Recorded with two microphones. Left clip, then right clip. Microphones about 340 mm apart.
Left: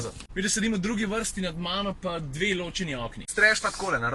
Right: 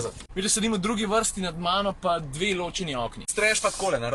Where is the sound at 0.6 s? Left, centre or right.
Right.